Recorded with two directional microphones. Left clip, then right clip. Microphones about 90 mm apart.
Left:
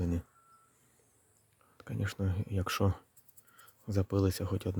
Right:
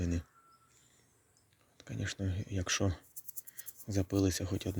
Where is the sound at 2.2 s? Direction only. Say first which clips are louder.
Left 2 dB; 90° left.